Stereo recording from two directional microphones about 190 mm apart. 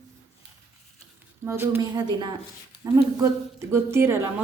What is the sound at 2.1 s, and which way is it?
Speech, 25° right (ahead or behind).